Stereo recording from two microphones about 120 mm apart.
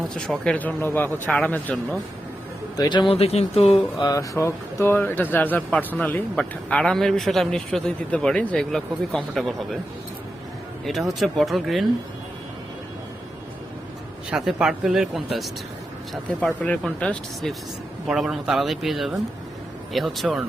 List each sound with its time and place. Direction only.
0.1 s speech: 5° left (ahead or behind)
2.7 s a man's voice: 35° left (ahead or behind)
3.2 s speech: 60° left (ahead or behind)
4.0 s speech: 25° left (ahead or behind); by 9.6 s centre (ahead or behind)
10.8 s speech: centre (ahead or behind)
14.3 s speech: 5° right (ahead or behind)
16.8 s speech: 5° left (ahead or behind)